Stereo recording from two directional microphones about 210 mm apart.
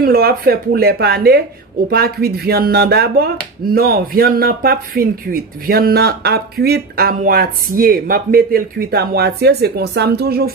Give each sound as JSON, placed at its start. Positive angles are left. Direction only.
{"t": 0.0, "sound": "speech", "side_deg": -45}